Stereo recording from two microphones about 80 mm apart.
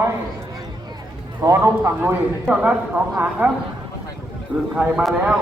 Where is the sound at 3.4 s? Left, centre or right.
Right.